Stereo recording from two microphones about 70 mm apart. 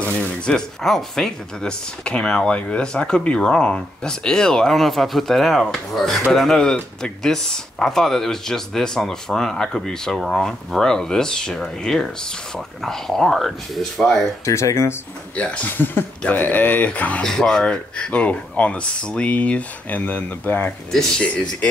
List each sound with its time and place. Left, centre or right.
0.0 s speech: centre
14.4 s speech: left
15.3 s speech: centre
15.7 s speech: left
21.2 s speech: centre